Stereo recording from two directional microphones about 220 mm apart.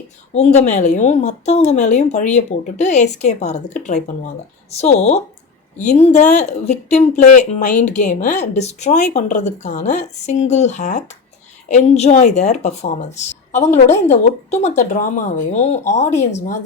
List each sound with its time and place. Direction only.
0.3 s speech: 30° left (ahead or behind)